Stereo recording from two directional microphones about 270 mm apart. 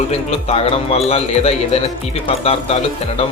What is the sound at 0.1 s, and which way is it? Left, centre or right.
Speech, left.